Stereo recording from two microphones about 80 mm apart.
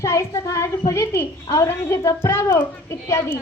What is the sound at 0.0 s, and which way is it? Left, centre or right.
A woman's voice, left.